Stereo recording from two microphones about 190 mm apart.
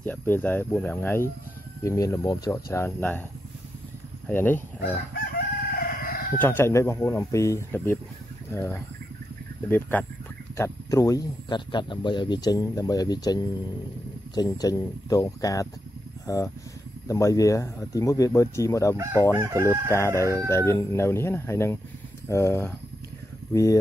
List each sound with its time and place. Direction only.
0.0 s speech: 10° left (ahead or behind)
4.3 s speech: 10° left (ahead or behind)
5.8 s crowing: 50° left (ahead or behind)
6.4 s speech: 10° left (ahead or behind)
19.3 s crowing: 15° right (ahead or behind)
19.9 s speech: 15° left (ahead or behind)